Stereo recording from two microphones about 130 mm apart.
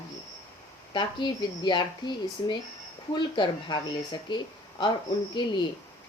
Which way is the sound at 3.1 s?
35° left (ahead or behind).